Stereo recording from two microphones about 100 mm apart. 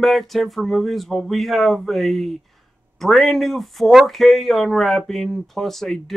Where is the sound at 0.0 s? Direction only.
Centre (ahead or behind).